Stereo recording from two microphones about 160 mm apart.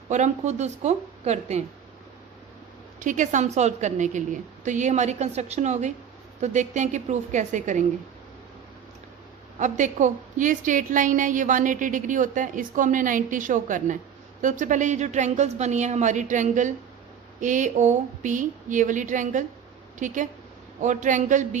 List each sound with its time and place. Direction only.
0.1 s a woman's voice: 45° right (ahead or behind)
3.0 s a woman's voice: 50° right (ahead or behind)
9.6 s a woman's voice: 50° right (ahead or behind)